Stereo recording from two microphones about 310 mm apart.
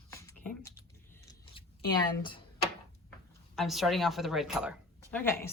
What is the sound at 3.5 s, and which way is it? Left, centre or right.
A woman's voice, centre.